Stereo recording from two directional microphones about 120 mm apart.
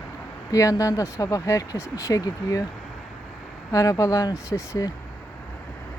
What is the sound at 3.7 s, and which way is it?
Speech, 30° left (ahead or behind).